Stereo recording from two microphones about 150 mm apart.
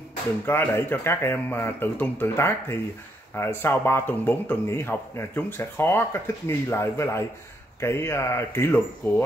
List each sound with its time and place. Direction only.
0.5 s a man's voice: 15° left (ahead or behind)